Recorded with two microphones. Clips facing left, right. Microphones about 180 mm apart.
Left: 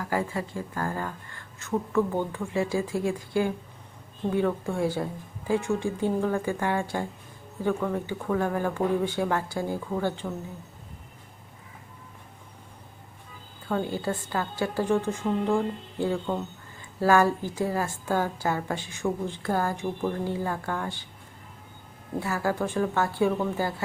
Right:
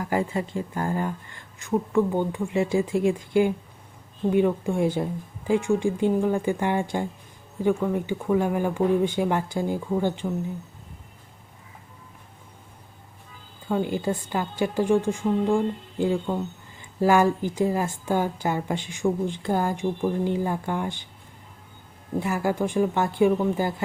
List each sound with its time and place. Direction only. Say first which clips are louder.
0.0 s a woman's voice: right 3 dB; 20° right (ahead or behind)
13.7 s a woman's voice: right 3 dB; 15° right (ahead or behind)
22.2 s a woman's voice: right 3 dB; 15° right (ahead or behind)